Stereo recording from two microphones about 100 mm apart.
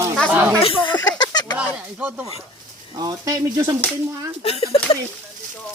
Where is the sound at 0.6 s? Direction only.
55° left (ahead or behind).